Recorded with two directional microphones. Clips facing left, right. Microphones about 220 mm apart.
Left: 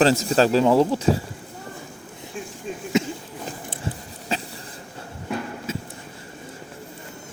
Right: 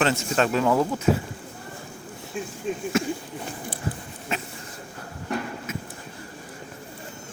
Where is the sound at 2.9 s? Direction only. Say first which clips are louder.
Left 4 dB; 20° left (ahead or behind).